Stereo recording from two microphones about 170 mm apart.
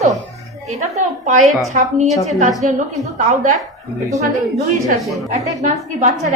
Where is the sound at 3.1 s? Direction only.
50° right (ahead or behind).